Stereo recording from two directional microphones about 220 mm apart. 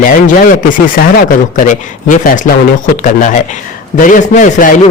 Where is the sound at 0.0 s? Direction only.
35° left (ahead or behind).